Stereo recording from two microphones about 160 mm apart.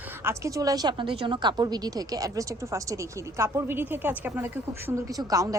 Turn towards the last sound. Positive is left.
turn(degrees=-20)  # may be behind; listen again after turning